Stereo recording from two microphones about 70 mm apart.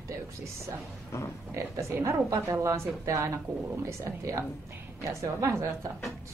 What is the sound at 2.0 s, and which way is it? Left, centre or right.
Speech, right.